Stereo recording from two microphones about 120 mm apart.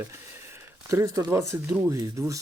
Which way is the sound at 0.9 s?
25° right (ahead or behind).